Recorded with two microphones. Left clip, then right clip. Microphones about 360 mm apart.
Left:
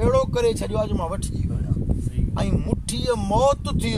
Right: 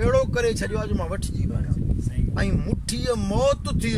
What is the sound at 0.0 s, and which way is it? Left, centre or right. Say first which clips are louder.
Speech: left 1 dB; centre.